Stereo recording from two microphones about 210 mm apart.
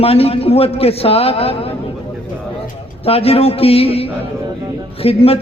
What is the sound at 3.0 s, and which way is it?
A man's voice, 30° left (ahead or behind).